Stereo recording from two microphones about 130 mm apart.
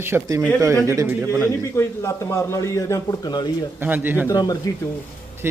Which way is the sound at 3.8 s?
15° right (ahead or behind).